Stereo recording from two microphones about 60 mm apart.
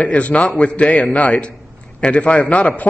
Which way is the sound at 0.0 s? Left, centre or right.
Left.